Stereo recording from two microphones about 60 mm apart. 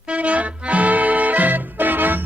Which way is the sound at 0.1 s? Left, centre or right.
Right.